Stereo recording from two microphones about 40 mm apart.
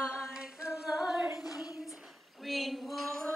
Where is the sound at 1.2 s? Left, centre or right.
Centre.